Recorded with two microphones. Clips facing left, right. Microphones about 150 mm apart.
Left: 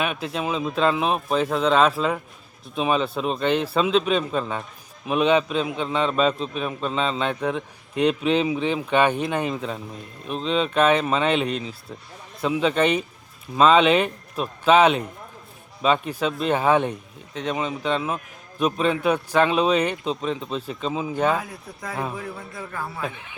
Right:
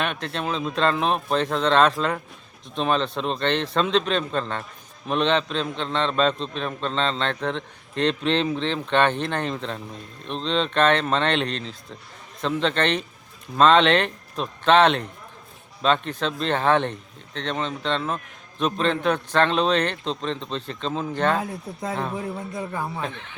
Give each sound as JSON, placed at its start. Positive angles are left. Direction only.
{"t": 0.0, "sound": "a man's voice", "side_deg": 5}
{"t": 21.3, "sound": "a man's voice", "side_deg": -25}
{"t": 23.0, "sound": "a man's voice", "side_deg": 10}